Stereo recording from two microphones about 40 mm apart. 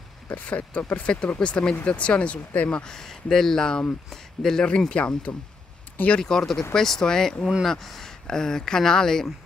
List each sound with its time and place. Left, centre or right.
0.3 s speech: left
2.7 s speech: centre
4.6 s speech: left
6.2 s speech: centre